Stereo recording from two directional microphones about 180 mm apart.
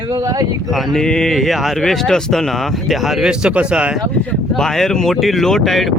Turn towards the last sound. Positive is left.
turn(degrees=0)  # may be behind; listen again after turning